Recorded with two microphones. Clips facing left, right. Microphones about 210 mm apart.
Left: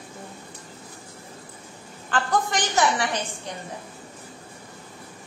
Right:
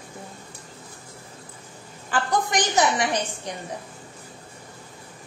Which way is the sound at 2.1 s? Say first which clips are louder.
Even; 15° right (ahead or behind).